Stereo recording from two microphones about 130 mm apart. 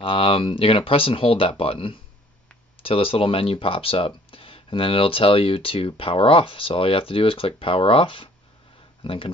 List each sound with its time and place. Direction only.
0.0 s speech: 45° left (ahead or behind)